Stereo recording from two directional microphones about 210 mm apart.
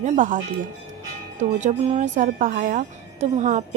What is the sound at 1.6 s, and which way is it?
Speech, 30° right (ahead or behind).